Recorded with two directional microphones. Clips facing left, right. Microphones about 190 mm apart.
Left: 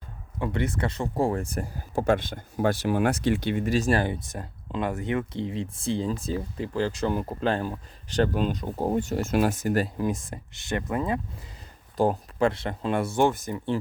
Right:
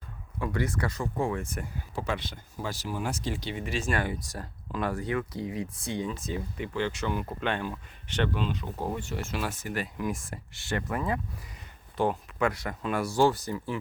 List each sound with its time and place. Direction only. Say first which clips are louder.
0.3 s speech: left 2 dB; 25° left (ahead or behind)
10.1 s speech: left 4 dB; 20° left (ahead or behind)
11.9 s speech: left 4 dB; 35° left (ahead or behind)